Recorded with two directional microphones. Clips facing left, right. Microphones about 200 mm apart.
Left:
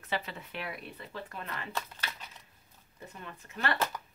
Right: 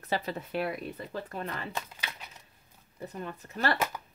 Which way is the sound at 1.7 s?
15° right (ahead or behind).